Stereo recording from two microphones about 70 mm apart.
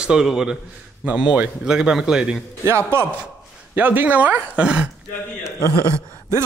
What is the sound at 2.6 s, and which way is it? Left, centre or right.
Speech, right.